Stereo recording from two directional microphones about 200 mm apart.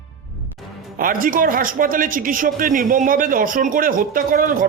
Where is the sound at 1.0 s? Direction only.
45° right (ahead or behind).